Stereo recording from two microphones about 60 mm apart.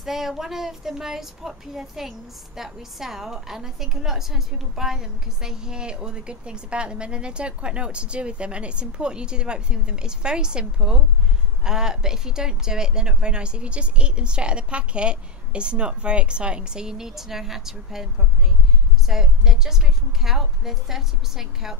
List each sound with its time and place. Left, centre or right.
0.0 s speech: centre
19.0 s speech: centre